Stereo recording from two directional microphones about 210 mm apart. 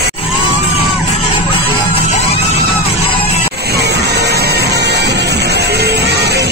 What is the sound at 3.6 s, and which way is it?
Music, 50° right (ahead or behind).